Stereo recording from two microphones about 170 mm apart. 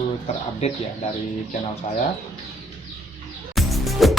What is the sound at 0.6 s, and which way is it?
Speech, 40° left (ahead or behind).